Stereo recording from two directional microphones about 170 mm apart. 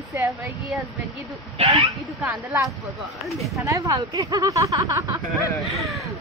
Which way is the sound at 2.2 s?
15° right (ahead or behind).